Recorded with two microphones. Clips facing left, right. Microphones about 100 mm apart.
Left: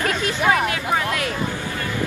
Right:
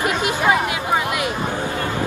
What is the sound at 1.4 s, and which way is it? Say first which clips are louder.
Music: right 3 dB; 60° right (ahead or behind).